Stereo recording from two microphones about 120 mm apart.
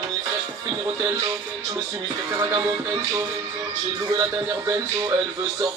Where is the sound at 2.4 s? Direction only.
30° right (ahead or behind).